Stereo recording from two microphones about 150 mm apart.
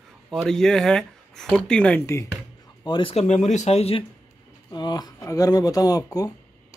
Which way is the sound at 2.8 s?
35° left (ahead or behind).